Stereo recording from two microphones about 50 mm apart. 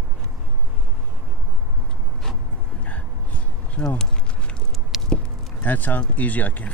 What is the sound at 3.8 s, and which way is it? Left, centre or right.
Speech, centre.